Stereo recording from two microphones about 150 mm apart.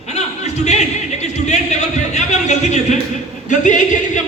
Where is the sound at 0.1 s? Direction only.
50° left (ahead or behind).